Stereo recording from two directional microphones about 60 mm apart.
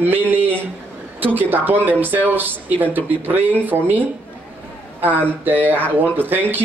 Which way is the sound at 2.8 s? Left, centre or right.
Right.